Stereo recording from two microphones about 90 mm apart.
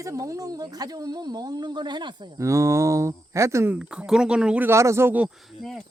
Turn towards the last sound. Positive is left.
turn(degrees=-30)  # may be behind; listen again after turning